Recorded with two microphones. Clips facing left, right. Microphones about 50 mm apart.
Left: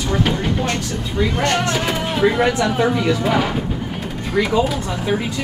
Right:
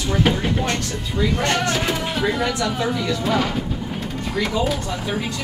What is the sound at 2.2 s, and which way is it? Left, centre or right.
Speech, left.